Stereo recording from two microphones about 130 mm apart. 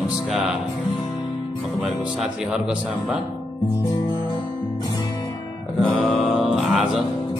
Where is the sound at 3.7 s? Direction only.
30° left (ahead or behind).